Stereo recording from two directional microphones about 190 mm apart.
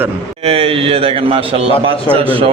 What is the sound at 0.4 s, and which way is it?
A man's voice, 30° right (ahead or behind).